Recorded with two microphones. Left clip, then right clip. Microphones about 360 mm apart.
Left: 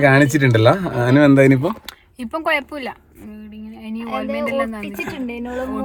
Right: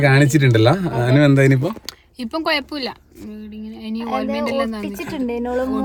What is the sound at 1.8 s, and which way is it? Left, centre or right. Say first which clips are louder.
Speech: right 2 dB; centre.